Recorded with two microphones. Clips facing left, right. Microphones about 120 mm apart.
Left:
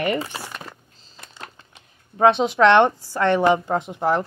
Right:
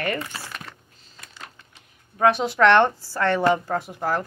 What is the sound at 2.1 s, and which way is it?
Speech, 20° left (ahead or behind).